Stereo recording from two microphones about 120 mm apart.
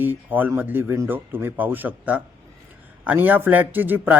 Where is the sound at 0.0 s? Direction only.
15° right (ahead or behind).